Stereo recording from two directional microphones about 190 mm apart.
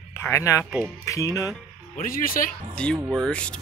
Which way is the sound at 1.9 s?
50° left (ahead or behind).